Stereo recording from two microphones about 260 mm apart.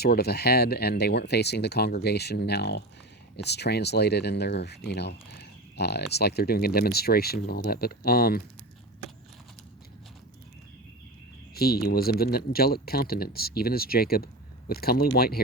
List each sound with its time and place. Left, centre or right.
0.0 s speech: left
11.5 s speech: left